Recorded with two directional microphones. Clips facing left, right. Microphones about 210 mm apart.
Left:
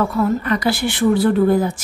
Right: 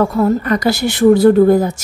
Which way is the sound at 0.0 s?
40° right (ahead or behind).